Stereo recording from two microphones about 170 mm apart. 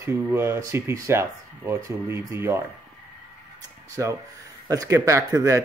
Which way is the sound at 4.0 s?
15° right (ahead or behind).